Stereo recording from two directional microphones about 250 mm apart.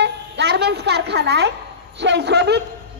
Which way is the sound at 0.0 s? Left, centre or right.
Right.